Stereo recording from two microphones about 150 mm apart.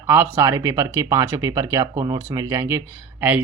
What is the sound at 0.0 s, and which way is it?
Speech, 15° right (ahead or behind).